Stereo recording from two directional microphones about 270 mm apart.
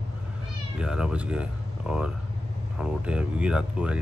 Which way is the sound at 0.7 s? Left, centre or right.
Centre.